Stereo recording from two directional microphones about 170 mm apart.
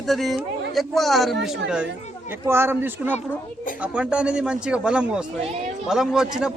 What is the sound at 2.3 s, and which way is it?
A man's voice, 15° right (ahead or behind).